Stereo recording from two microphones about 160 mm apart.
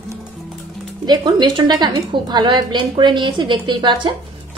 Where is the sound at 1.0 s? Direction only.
25° right (ahead or behind).